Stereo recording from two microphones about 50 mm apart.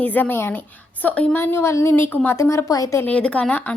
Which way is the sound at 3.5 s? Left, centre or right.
Left.